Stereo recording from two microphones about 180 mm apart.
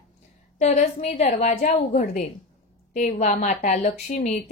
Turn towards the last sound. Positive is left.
turn(degrees=40)  # may be behind; listen again after turning